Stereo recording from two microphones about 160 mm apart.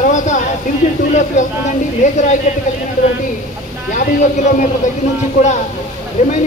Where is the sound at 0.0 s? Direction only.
50° left (ahead or behind).